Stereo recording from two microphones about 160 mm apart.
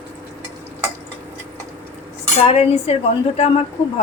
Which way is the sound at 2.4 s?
40° left (ahead or behind).